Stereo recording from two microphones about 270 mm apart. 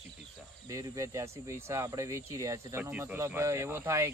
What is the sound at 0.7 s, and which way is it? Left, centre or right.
Speech, centre.